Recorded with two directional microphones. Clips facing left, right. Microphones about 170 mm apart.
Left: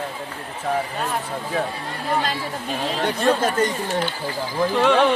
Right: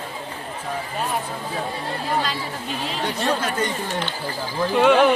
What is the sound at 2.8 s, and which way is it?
Speech, 45° left (ahead or behind).